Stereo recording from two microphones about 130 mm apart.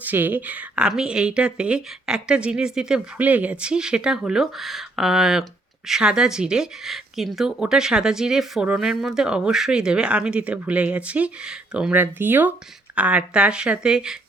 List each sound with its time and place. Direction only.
0.0 s speech: 15° right (ahead or behind)